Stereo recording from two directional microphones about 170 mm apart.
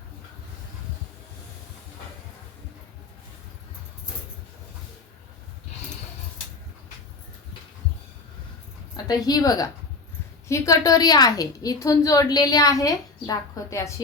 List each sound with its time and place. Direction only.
9.0 s a woman's voice: 20° left (ahead or behind)